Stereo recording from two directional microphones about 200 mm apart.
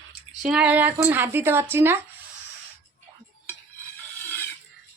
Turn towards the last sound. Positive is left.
turn(degrees=10)  # may be behind; listen again after turning